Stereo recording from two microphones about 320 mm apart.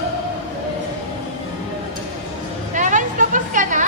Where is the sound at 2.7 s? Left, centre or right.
Right.